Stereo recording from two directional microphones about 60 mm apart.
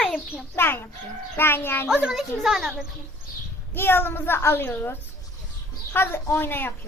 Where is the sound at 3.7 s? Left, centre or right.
Left.